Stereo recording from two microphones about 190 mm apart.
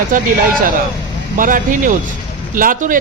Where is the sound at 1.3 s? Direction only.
45° right (ahead or behind).